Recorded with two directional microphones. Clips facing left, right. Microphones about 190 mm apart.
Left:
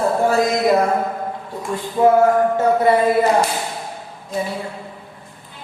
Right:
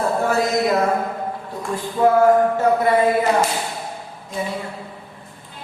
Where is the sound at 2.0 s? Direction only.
20° left (ahead or behind).